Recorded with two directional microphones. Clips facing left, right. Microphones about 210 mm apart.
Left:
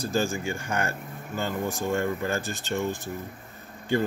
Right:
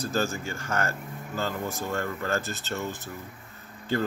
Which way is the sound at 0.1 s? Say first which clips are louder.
Left 4 dB; 15° left (ahead or behind).